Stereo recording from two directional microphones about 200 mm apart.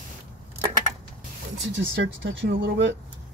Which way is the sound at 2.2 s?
65° right (ahead or behind).